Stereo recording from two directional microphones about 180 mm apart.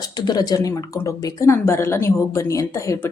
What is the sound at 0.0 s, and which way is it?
A woman's voice, 20° left (ahead or behind).